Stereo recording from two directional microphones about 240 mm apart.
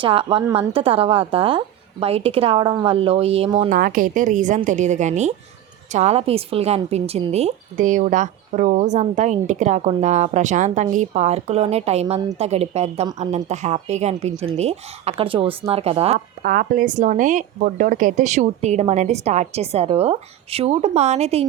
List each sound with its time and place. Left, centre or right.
0.0 s a woman's voice: right
16.4 s a woman's voice: right